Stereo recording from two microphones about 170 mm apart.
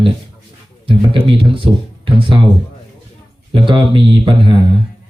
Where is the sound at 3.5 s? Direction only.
30° right (ahead or behind).